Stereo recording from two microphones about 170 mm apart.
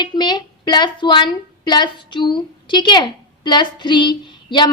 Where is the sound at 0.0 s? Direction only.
25° left (ahead or behind).